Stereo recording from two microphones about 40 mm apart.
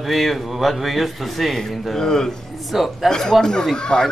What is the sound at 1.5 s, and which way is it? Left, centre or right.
Speech, centre.